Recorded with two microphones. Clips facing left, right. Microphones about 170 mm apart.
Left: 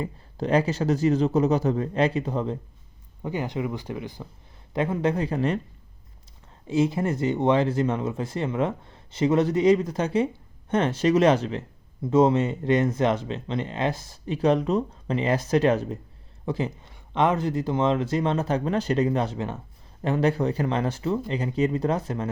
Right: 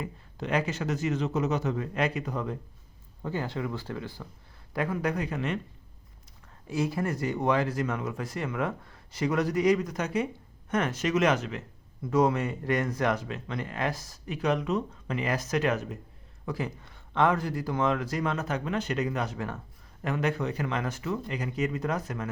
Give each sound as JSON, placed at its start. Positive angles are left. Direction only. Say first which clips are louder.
{"t": 0.0, "sound": "speech", "louder": "left 6 dB", "side_deg": 35}
{"t": 3.2, "sound": "speech", "louder": "left 4 dB", "side_deg": 15}
{"t": 6.7, "sound": "speech", "louder": "left 6 dB", "side_deg": 25}